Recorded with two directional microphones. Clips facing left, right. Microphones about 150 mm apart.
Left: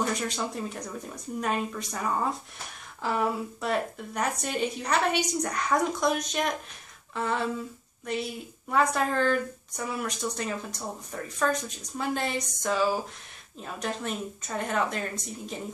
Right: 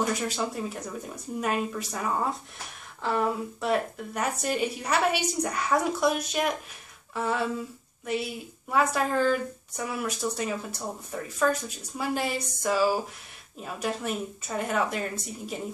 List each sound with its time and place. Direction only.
0.0 s a woman's voice: 5° right (ahead or behind)